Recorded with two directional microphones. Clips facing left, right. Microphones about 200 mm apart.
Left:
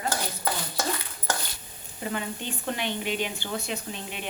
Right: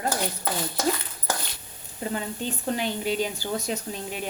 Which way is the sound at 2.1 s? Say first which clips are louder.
Right 2 dB; 35° right (ahead or behind).